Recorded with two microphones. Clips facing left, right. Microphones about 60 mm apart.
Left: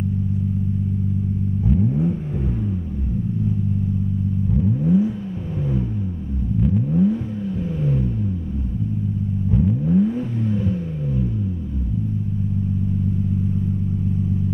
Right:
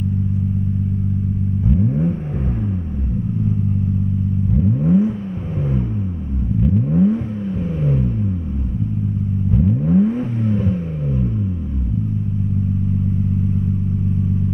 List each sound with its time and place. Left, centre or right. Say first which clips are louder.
4.8 s vehicle: right 2 dB; right
6.9 s vehicle: right 3 dB; right
9.8 s vehicle: right 4 dB; right